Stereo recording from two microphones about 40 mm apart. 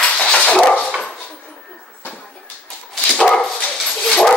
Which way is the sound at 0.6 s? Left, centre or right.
Left.